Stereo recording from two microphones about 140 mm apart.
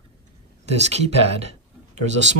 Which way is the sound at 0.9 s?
45° right (ahead or behind).